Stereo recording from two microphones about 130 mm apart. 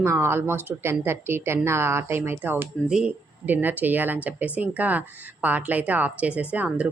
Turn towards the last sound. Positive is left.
turn(degrees=-10)  # may be behind; listen again after turning